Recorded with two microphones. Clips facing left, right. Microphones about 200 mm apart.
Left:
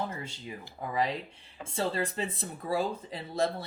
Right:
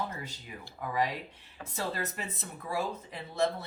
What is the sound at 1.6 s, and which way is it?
Speech, 30° left (ahead or behind).